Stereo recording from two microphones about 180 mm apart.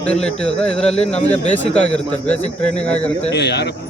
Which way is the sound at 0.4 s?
5° left (ahead or behind).